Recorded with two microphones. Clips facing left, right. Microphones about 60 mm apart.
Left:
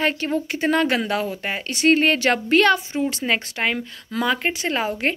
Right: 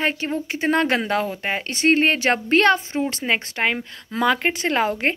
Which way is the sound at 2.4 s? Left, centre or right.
Right.